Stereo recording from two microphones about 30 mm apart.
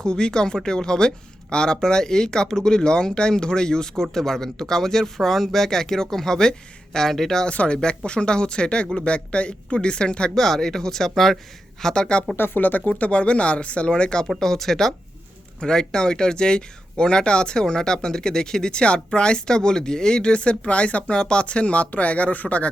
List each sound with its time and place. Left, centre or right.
0.0 s speech: left; by 7.3 s centre
7.5 s speech: left
7.8 s speech: left
10.3 s speech: centre
12.5 s speech: left
13.0 s speech: left
13.9 s speech: left
14.3 s speech: centre; by 21.2 s left
21.2 s speech: left
21.4 s speech: left